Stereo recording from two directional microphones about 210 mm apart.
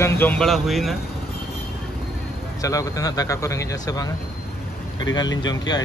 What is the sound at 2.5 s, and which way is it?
Speech, 15° left (ahead or behind).